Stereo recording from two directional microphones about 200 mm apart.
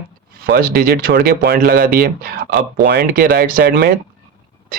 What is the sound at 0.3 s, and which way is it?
Speech, 45° right (ahead or behind).